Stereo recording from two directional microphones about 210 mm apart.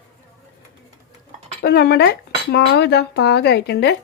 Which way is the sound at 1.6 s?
45° left (ahead or behind).